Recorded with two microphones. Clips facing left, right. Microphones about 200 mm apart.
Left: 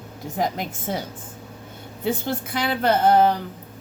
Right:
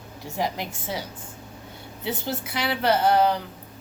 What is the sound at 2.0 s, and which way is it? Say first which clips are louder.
A woman's voice: left 5 dB; 50° left (ahead or behind).